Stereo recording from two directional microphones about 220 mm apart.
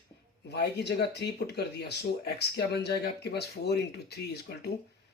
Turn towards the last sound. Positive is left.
turn(degrees=45)  # may be behind; listen again after turning